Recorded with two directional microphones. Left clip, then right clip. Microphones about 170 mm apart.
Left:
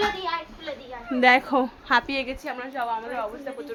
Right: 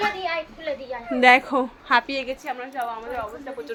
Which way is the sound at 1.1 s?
Centre (ahead or behind).